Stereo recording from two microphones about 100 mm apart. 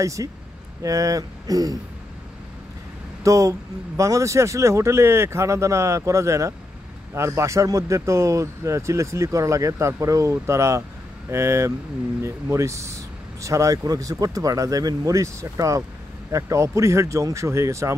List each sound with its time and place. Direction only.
0.0 s speech: 30° right (ahead or behind)
3.3 s speech: 35° right (ahead or behind)